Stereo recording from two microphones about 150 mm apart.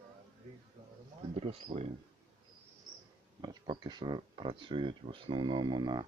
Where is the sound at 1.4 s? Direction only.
45° right (ahead or behind).